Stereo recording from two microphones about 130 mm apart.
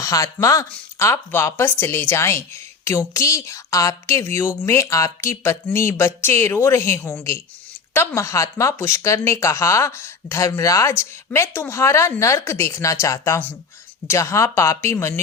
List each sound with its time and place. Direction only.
0.0 s speech: 25° left (ahead or behind)